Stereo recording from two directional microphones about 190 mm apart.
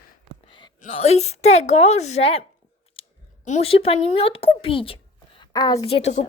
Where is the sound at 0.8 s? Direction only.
40° left (ahead or behind).